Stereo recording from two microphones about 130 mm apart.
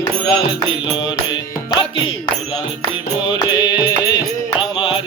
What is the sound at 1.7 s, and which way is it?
Music, 40° left (ahead or behind).